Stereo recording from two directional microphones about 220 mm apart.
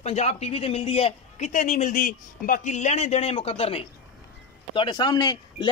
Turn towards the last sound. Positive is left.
turn(degrees=20)  # may be behind; listen again after turning